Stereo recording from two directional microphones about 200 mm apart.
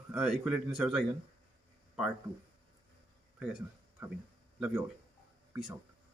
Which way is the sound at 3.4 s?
5° right (ahead or behind).